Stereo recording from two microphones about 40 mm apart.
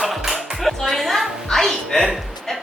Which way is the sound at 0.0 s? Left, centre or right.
Centre.